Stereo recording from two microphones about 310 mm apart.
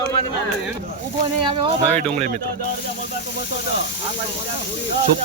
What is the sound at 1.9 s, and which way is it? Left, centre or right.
Speech, centre.